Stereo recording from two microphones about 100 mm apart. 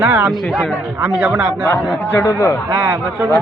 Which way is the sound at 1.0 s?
15° right (ahead or behind).